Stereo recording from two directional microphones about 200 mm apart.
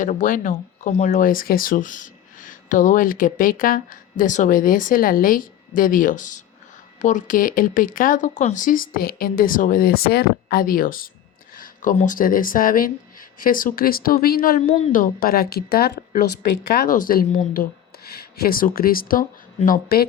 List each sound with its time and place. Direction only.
0.0 s speech: 40° left (ahead or behind)